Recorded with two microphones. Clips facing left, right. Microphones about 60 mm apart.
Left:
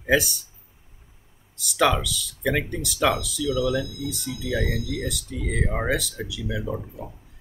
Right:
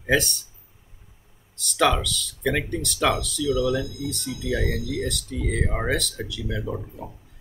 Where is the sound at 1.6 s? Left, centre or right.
Centre.